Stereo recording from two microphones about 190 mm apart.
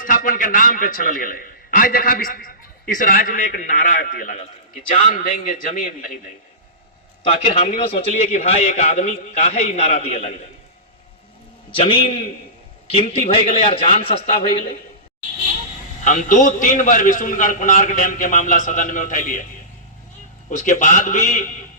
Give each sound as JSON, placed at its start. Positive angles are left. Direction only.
{"t": 0.0, "sound": "a man's voice", "side_deg": 45}
{"t": 7.4, "sound": "a man's voice", "side_deg": 30}
{"t": 11.7, "sound": "a man's voice", "side_deg": 25}
{"t": 16.0, "sound": "a man's voice", "side_deg": 40}
{"t": 20.5, "sound": "a man's voice", "side_deg": 40}